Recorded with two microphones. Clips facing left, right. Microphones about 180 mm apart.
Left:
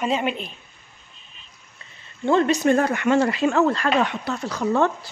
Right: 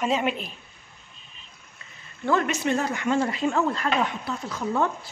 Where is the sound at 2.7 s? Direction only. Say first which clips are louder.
Left 3 dB; 60° left (ahead or behind).